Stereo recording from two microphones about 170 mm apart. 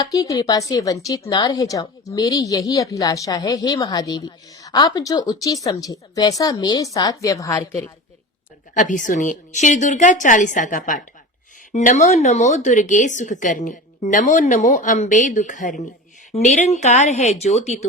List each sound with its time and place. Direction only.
0.0 s a woman's voice: 20° left (ahead or behind)
8.7 s speech: 50° left (ahead or behind)